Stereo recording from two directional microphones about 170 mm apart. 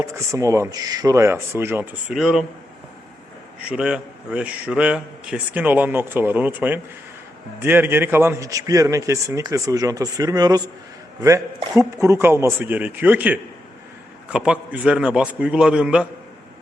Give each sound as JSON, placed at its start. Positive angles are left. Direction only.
{"t": 0.0, "sound": "a man's voice", "side_deg": -20}
{"t": 2.0, "sound": "a man's voice", "side_deg": -5}
{"t": 3.7, "sound": "a man's voice", "side_deg": -5}